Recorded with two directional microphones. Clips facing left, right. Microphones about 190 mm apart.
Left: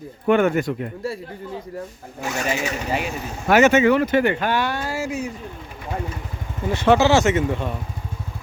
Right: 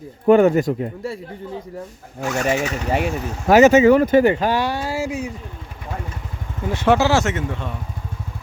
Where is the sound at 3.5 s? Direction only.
35° right (ahead or behind).